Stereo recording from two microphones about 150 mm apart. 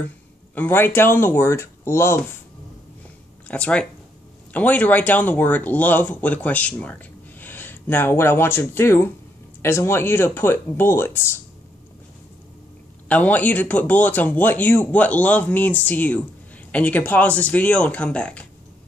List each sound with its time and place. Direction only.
0.6 s speech: 15° left (ahead or behind)
3.4 s speech: 10° left (ahead or behind)
13.1 s speech: 10° left (ahead or behind)